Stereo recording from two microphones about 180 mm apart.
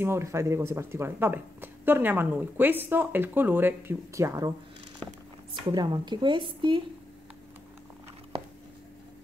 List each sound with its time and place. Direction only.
0.0 s speech: 15° right (ahead or behind)